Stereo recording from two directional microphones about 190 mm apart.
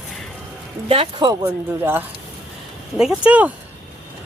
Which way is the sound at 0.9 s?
25° right (ahead or behind).